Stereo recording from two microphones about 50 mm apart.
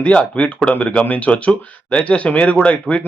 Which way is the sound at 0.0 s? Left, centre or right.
Left.